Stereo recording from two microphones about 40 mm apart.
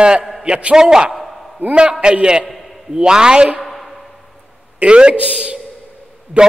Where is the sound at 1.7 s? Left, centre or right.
Right.